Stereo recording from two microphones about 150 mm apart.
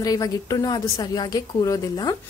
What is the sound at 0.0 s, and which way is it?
A woman's voice, 25° left (ahead or behind).